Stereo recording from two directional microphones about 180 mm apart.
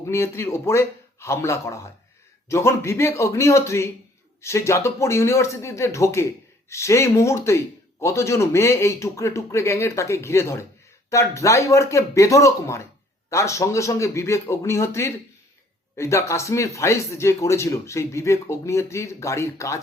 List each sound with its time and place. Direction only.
0.0 s a man's voice: 15° left (ahead or behind)